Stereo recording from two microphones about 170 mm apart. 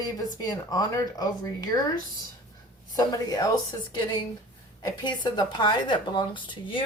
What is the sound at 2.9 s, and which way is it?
Speech, 20° left (ahead or behind).